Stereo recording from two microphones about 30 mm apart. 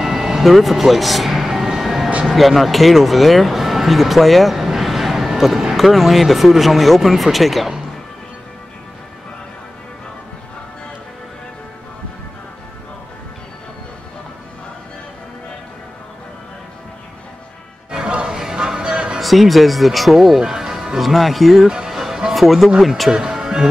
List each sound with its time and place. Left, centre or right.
0.0 s vehicle: centre
0.5 s speech: centre
1.8 s music: centre
2.3 s speech: centre
4.6 s a sound: centre
5.8 s speech: centre
18.2 s music: centre
19.1 s speech: centre
20.2 s speech: centre
21.0 s speech: centre
21.6 s speech: right
21.9 s music: centre
22.3 s a man's voice: centre
23.3 s music: centre